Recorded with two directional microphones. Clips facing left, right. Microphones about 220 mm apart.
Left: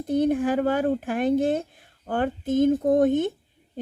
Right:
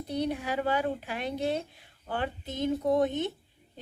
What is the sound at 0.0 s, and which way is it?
Speech, 50° left (ahead or behind).